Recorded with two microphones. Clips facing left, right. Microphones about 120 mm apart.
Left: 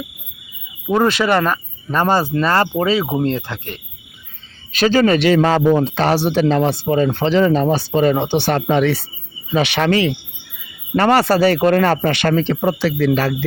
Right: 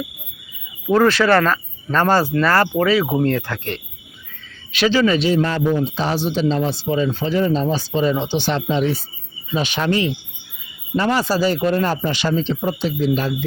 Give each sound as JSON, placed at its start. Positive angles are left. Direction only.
{"t": 0.9, "sound": "speech", "side_deg": 15}
{"t": 4.7, "sound": "a man's voice", "side_deg": 45}
{"t": 5.2, "sound": "speech", "side_deg": 90}